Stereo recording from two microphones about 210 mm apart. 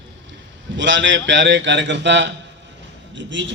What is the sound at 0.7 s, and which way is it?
A man's voice, 60° right (ahead or behind).